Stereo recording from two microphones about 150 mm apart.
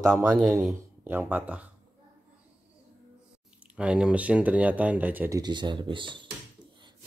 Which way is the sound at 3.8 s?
5° right (ahead or behind).